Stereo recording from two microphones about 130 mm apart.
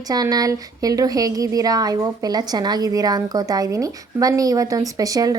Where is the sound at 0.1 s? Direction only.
30° right (ahead or behind).